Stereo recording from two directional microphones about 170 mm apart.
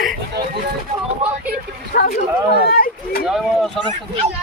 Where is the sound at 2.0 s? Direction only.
65° left (ahead or behind).